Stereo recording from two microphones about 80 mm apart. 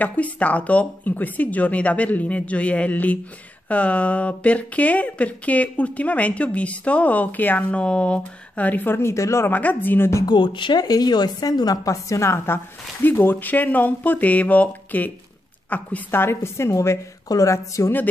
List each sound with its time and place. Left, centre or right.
0.0 s speech: centre; by 9.5 s left
9.5 s speech: left
10.2 s speech: left
10.8 s a woman's voice: left